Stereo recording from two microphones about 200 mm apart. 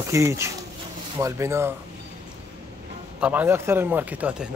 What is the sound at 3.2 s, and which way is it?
Speech, 5° right (ahead or behind).